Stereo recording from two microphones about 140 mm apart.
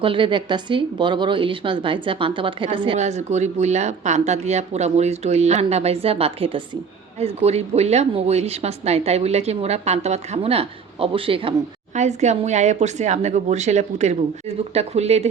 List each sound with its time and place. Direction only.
0.0 s speech: 35° right (ahead or behind)
3.0 s a woman's voice: 55° right (ahead or behind)
11.9 s a woman's voice: 55° right (ahead or behind)